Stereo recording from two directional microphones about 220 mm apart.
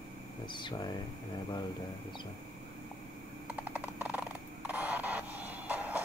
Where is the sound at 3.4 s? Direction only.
5° right (ahead or behind).